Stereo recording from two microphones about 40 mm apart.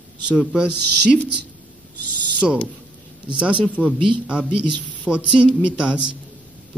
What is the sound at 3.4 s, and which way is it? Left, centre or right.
Speech, right.